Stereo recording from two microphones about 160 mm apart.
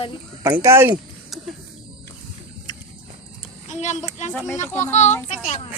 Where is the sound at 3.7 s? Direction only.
45° left (ahead or behind).